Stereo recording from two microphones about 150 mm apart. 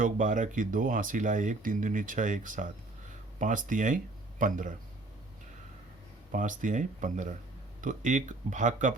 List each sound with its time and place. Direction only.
0.0 s speech: 60° right (ahead or behind)
6.3 s speech: 60° right (ahead or behind)